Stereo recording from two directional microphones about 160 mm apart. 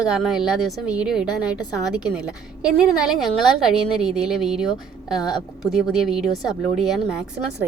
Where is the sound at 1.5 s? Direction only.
25° left (ahead or behind).